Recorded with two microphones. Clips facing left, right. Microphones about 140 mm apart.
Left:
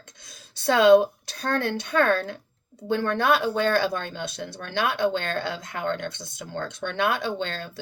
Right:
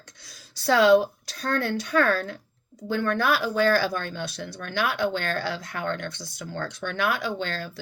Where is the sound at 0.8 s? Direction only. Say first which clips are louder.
Left 4 dB; 55° left (ahead or behind).